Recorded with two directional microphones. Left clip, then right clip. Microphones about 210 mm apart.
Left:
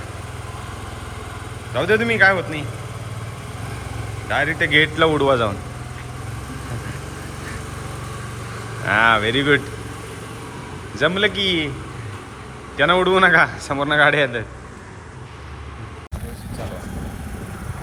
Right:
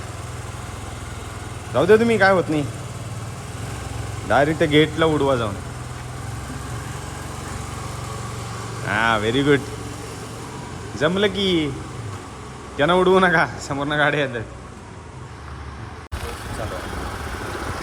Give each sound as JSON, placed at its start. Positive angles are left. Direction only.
{"t": 1.7, "sound": "speech", "side_deg": -20}
{"t": 4.6, "sound": "a man's voice", "side_deg": -20}
{"t": 8.8, "sound": "a man's voice", "side_deg": -5}
{"t": 10.9, "sound": "speech", "side_deg": -15}
{"t": 12.7, "sound": "a man's voice", "side_deg": -15}